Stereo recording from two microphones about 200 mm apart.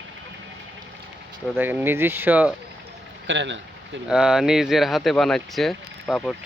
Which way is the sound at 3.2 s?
65° right (ahead or behind).